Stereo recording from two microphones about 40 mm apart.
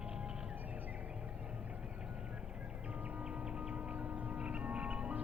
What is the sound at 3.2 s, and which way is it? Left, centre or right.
Music, right.